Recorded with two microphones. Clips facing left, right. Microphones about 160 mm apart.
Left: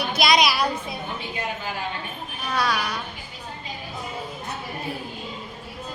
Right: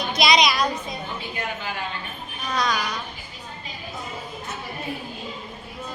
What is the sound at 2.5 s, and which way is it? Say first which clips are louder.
Speech: even; 5° left (ahead or behind).